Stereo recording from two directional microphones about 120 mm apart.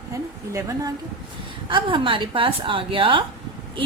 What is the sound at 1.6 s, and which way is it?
A woman's voice, 45° right (ahead or behind).